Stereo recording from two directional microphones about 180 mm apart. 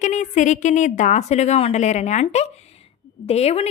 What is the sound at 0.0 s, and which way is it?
A woman's voice, 40° left (ahead or behind).